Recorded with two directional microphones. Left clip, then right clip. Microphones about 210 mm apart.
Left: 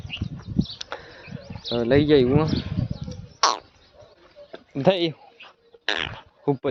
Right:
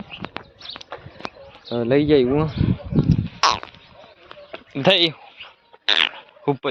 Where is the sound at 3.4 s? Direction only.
15° left (ahead or behind).